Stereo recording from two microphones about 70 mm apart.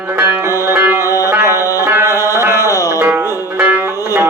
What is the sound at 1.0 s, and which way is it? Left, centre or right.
Music, left.